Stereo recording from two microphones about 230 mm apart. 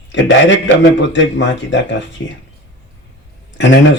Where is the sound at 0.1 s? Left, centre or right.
Left.